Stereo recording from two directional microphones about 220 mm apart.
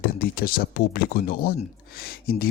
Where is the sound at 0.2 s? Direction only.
40° left (ahead or behind).